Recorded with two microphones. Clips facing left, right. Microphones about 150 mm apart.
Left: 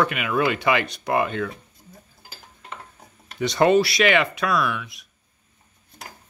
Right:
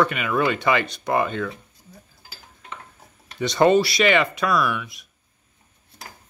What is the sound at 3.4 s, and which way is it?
Speech, 5° left (ahead or behind).